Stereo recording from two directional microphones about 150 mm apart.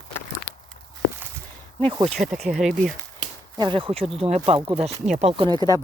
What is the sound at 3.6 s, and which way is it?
Speech, 35° right (ahead or behind).